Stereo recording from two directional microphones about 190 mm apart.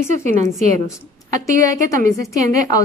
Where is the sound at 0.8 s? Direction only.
15° left (ahead or behind).